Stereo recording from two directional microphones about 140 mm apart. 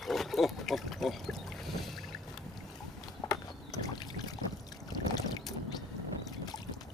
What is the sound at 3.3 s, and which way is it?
Rowboat, 25° left (ahead or behind).